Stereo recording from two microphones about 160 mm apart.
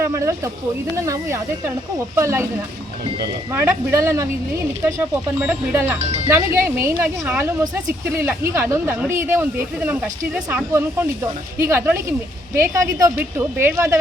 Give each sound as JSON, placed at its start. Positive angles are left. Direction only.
{"t": 0.0, "sound": "speech", "side_deg": -20}
{"t": 3.5, "sound": "speech", "side_deg": -15}
{"t": 5.4, "sound": "speech", "side_deg": -10}
{"t": 6.0, "sound": "speech", "side_deg": -40}
{"t": 6.2, "sound": "speech", "side_deg": -15}